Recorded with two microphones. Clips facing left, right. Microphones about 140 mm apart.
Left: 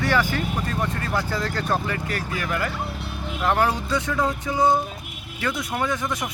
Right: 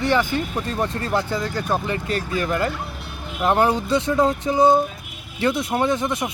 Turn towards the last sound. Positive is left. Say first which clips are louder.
# right 5 dB
turn(degrees=-25)  # may be behind; listen again after turning